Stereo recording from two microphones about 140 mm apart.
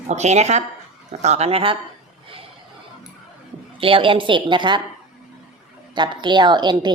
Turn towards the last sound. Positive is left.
turn(degrees=-30)  # may be behind; listen again after turning